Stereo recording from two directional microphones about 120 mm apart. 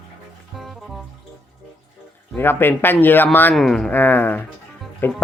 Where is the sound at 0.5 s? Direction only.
Centre (ahead or behind).